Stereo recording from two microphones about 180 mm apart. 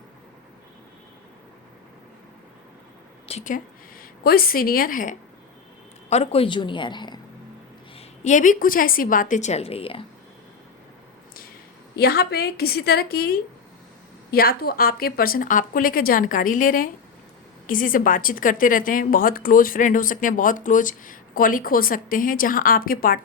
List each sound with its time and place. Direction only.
3.2 s speech: 40° left (ahead or behind)
4.2 s a woman's voice: 55° left (ahead or behind)
6.1 s speech: 35° left (ahead or behind)
7.9 s a woman's voice: 40° left (ahead or behind)
11.9 s a woman's voice: 60° left (ahead or behind)